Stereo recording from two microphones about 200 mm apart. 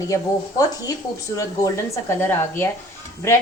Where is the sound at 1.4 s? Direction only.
15° left (ahead or behind).